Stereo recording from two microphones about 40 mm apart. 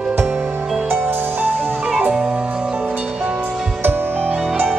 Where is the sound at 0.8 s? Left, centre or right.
Right.